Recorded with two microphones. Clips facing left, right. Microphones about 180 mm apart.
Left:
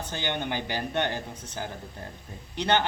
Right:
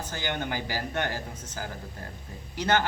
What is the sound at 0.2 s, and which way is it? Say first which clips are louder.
Speech: left 1 dB; 20° left (ahead or behind).